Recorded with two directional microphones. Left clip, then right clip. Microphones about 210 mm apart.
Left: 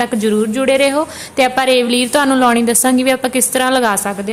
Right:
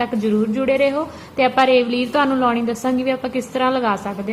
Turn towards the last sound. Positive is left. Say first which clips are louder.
# left 5 dB
turn(degrees=45)  # may be behind; listen again after turning